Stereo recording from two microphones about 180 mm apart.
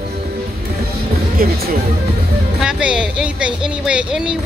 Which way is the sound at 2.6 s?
5° right (ahead or behind).